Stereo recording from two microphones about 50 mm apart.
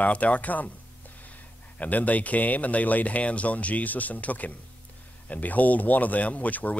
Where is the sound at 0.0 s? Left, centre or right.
Left.